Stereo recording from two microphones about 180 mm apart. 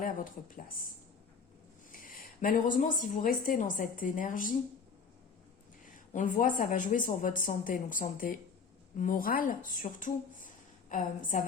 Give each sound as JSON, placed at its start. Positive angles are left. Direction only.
{"t": 0.5, "sound": "a woman's voice", "side_deg": 50}
{"t": 1.9, "sound": "a woman's voice", "side_deg": 50}
{"t": 6.1, "sound": "a woman's voice", "side_deg": 45}